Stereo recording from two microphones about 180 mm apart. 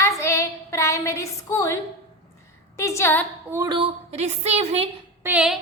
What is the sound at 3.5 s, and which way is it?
Speech, 20° right (ahead or behind).